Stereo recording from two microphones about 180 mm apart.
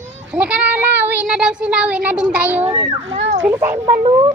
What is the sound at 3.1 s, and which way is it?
Speech, 90° right.